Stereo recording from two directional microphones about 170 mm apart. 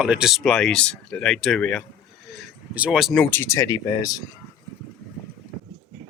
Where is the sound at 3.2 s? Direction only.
10° left (ahead or behind).